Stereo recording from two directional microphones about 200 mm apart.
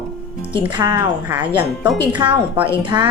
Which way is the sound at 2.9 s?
20° right (ahead or behind).